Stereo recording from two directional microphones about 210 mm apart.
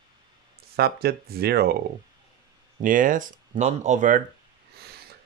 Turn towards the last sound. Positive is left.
turn(degrees=-35)  # may be behind; listen again after turning